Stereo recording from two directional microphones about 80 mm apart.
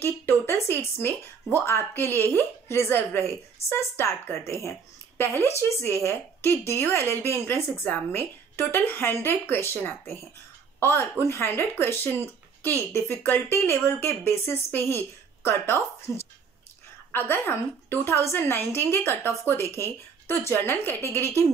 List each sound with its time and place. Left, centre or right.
0.0 s a woman's voice: left
13.2 s a woman's voice: left